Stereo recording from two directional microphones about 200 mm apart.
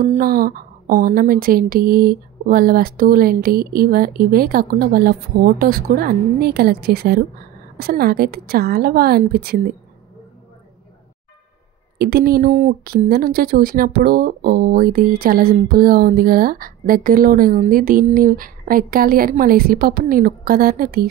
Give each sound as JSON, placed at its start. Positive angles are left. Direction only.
{"t": 0.0, "sound": "speech", "side_deg": -45}
{"t": 12.0, "sound": "speech", "side_deg": -50}